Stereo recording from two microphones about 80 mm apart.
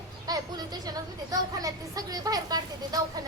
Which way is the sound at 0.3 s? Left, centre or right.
Right.